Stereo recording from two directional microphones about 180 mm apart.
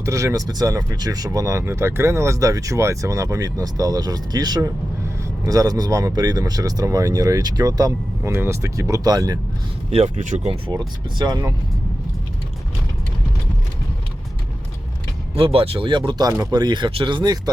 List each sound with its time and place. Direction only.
0.0 s speech: 15° right (ahead or behind)
9.9 s speech: 40° right (ahead or behind)
11.2 s speech: 20° right (ahead or behind)
15.4 s speech: 30° right (ahead or behind)